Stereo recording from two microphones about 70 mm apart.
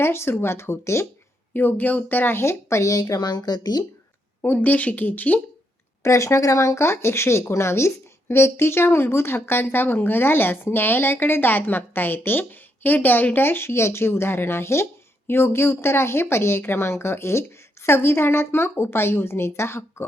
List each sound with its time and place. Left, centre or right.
0.0 s speech: left
1.5 s speech: left
3.0 s speech: left
4.4 s speech: left
6.0 s speech: left